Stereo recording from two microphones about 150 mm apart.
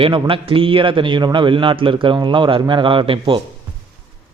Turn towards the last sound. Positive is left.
turn(degrees=-35)  # may be behind; listen again after turning